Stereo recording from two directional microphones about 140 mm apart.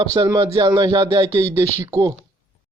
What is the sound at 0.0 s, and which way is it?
Speech, 25° right (ahead or behind).